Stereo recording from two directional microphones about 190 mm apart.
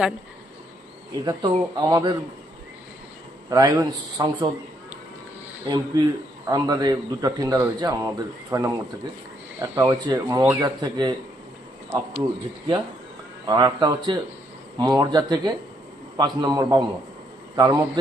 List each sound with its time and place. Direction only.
1.2 s a man's voice: 20° right (ahead or behind)
3.5 s a man's voice: 20° right (ahead or behind)
5.6 s a man's voice: 20° right (ahead or behind)
13.5 s a man's voice: 20° right (ahead or behind)